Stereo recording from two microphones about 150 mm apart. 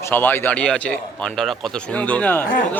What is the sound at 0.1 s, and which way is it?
A man's voice, 15° left (ahead or behind).